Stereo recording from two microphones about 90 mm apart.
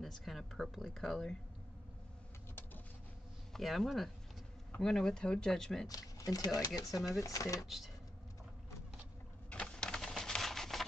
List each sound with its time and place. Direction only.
0.0 s speech: centre (ahead or behind)
3.5 s speech: centre (ahead or behind)
5.9 s speech: 40° left (ahead or behind)
7.6 s speech: 5° right (ahead or behind)
9.5 s a sound: 10° left (ahead or behind)